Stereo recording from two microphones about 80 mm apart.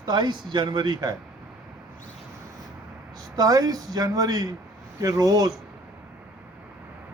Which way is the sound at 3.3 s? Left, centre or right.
Right.